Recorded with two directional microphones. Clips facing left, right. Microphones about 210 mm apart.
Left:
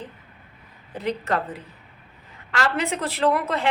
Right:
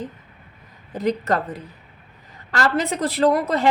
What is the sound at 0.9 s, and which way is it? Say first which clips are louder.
A woman's voice: right 4 dB; 40° right (ahead or behind).